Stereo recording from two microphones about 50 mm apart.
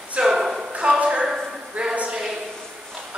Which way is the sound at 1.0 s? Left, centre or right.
Right.